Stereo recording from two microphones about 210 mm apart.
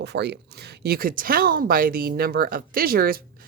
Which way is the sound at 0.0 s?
55° right (ahead or behind).